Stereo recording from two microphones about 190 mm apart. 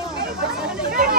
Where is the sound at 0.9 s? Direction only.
50° right (ahead or behind).